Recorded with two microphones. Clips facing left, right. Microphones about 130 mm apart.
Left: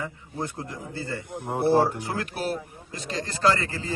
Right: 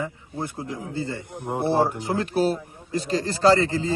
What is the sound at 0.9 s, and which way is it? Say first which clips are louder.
Speech: even; 20° right (ahead or behind).